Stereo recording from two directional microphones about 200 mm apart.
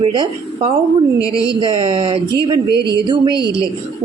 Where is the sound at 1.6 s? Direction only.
25° right (ahead or behind).